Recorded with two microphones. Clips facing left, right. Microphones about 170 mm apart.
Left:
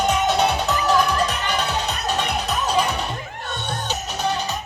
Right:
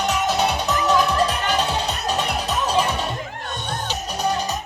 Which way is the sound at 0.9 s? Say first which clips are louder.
Right 1 dB; 25° right (ahead or behind).